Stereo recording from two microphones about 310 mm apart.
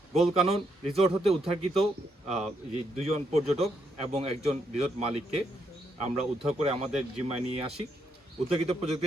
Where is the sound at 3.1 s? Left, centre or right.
Centre.